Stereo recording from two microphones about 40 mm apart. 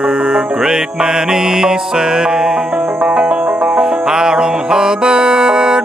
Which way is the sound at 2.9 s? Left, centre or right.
Right.